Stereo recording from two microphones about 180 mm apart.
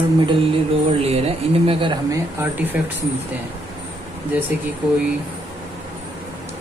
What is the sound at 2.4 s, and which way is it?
Speech, 10° right (ahead or behind).